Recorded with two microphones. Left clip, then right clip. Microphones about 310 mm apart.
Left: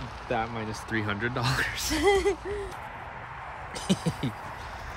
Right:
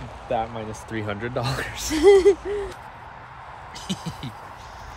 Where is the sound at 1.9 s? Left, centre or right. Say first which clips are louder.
Right 10 dB; centre.